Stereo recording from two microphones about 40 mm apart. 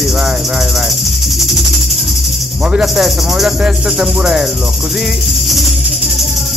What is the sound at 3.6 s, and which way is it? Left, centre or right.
Music, centre.